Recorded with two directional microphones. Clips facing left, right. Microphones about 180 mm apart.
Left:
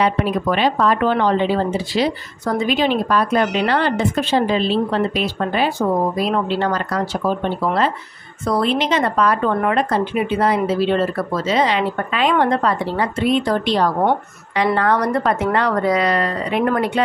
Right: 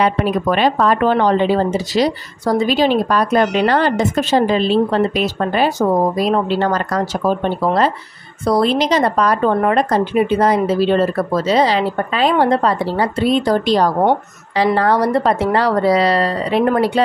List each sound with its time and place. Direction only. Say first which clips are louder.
0.0 s speech: right 2 dB; 45° right (ahead or behind)